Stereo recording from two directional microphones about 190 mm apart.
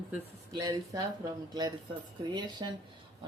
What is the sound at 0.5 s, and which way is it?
Speech, 20° right (ahead or behind).